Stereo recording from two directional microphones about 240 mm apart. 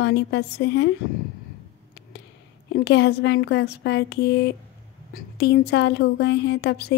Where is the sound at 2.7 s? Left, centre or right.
Left.